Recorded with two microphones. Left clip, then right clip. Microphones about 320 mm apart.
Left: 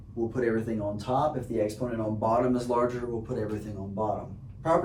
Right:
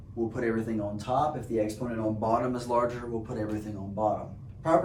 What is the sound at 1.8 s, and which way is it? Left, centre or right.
Speech, centre.